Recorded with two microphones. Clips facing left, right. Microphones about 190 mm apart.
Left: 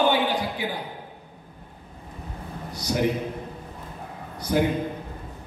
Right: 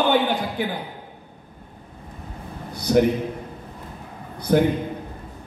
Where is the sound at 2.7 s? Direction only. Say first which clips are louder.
Right 9 dB; 55° right (ahead or behind).